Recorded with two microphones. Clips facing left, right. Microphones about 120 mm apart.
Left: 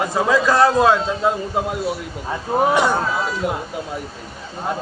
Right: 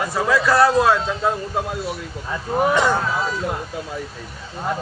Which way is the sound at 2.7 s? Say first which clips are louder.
Left 1 dB; 15° left (ahead or behind).